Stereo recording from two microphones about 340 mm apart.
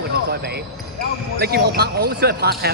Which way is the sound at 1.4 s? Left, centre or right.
Right.